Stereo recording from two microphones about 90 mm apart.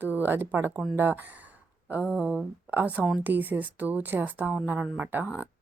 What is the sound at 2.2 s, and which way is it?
A woman's voice, 10° right (ahead or behind).